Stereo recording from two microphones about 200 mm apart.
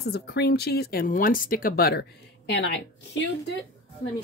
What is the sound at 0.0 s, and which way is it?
Speech, 55° left (ahead or behind).